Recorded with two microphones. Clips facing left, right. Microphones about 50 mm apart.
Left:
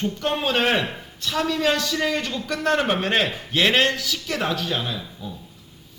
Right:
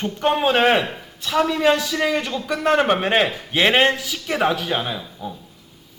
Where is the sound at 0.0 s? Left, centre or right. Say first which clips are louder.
Right 5 dB; right.